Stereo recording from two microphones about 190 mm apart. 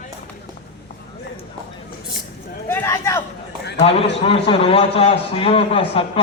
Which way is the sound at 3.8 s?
30° left (ahead or behind).